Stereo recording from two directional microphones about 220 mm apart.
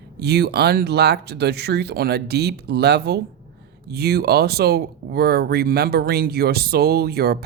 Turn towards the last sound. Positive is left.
turn(degrees=-45)  # may be behind; listen again after turning